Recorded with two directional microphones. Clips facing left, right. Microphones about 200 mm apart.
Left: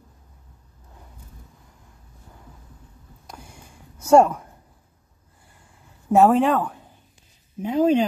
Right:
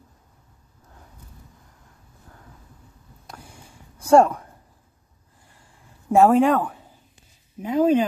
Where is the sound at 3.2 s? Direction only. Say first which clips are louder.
Even; 5° left (ahead or behind).